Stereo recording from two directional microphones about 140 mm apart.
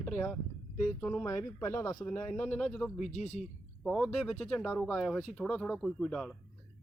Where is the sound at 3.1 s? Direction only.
55° left (ahead or behind).